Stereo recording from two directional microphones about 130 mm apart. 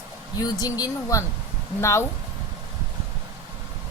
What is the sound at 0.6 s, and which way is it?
Speech, 30° left (ahead or behind).